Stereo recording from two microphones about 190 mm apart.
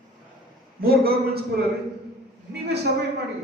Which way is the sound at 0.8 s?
50° right (ahead or behind).